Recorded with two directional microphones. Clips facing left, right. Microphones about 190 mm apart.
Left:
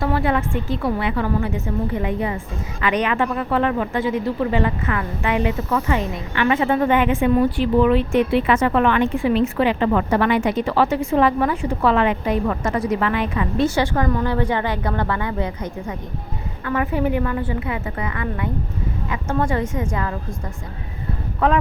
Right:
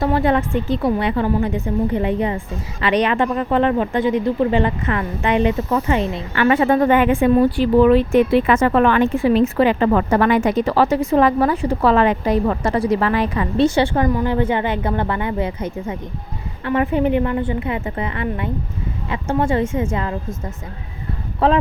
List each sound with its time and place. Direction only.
0.0 s a woman's voice: 25° right (ahead or behind)
4.6 s a woman's voice: 30° right (ahead or behind)
6.3 s speech: 45° right (ahead or behind); by 14.1 s 25° right (ahead or behind)
14.1 s a woman's voice: 15° right (ahead or behind)
16.6 s a woman's voice: 25° right (ahead or behind)
21.4 s a woman's voice: 30° right (ahead or behind)